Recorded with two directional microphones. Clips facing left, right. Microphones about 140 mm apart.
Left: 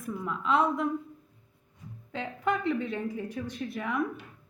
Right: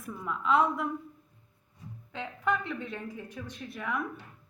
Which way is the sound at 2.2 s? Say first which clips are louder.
Left 2 dB; 30° left (ahead or behind).